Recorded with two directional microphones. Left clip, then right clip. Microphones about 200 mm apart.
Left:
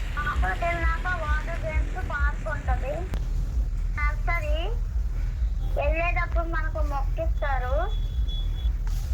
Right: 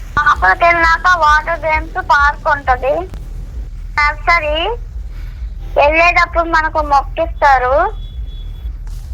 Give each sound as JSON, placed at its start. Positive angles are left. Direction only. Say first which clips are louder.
{"t": 0.3, "sound": "speech", "louder": "right 18 dB", "side_deg": -50}
{"t": 3.9, "sound": "speech", "louder": "right 18 dB", "side_deg": -50}
{"t": 5.7, "sound": "speech", "louder": "right 18 dB", "side_deg": -50}